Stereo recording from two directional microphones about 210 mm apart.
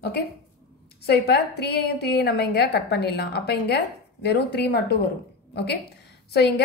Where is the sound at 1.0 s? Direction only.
50° left (ahead or behind).